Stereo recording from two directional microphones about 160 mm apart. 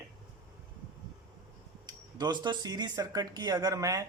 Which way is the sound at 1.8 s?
25° right (ahead or behind).